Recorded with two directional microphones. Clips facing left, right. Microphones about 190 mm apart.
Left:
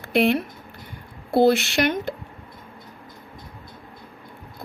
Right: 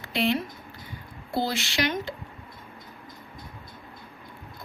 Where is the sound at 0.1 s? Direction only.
55° left (ahead or behind).